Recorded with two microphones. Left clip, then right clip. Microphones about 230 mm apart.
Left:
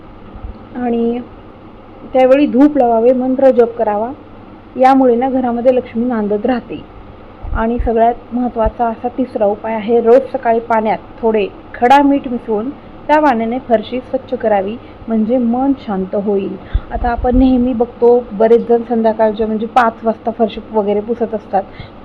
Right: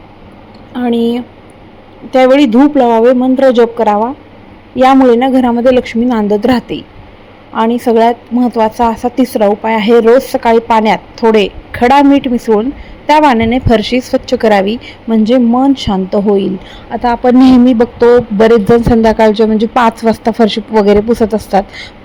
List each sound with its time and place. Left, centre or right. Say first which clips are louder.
0.8 s a man's voice: right 4 dB; right